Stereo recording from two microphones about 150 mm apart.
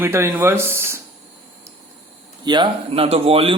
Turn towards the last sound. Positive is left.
turn(degrees=-40)  # may be behind; listen again after turning